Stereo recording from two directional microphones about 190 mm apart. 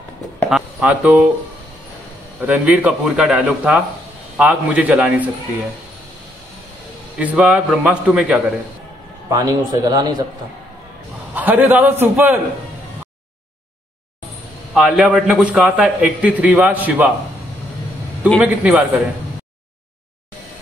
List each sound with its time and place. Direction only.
0.5 s speech: 5° right (ahead or behind)
2.4 s a man's voice: 5° right (ahead or behind)
7.2 s a man's voice: 5° right (ahead or behind)
9.3 s a man's voice: 20° right (ahead or behind)
11.3 s a man's voice: 10° right (ahead or behind)
14.7 s a man's voice: centre (ahead or behind)
18.4 s a man's voice: 5° right (ahead or behind)